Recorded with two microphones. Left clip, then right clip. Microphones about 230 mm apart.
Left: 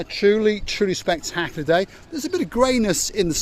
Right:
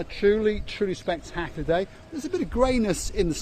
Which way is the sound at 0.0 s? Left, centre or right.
Left.